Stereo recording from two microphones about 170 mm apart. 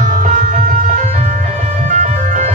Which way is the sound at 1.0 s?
45° right (ahead or behind).